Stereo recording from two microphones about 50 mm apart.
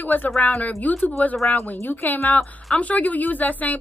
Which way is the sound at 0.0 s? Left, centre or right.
Left.